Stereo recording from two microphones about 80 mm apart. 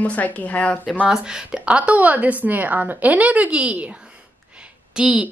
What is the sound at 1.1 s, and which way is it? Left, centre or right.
A woman's voice, centre.